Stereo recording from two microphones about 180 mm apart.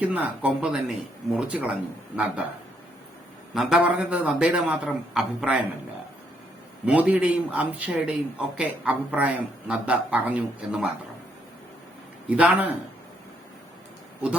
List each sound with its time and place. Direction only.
0.0 s a man's voice: 10° right (ahead or behind)
3.5 s a man's voice: 5° right (ahead or behind)
6.8 s speech: 10° right (ahead or behind)
12.3 s speech: 10° right (ahead or behind)